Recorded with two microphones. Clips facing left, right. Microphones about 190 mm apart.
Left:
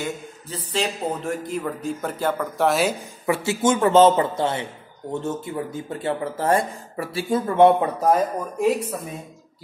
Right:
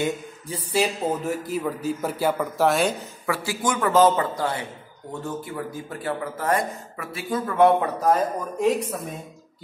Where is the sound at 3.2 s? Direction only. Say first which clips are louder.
Left 5 dB; 25° left (ahead or behind).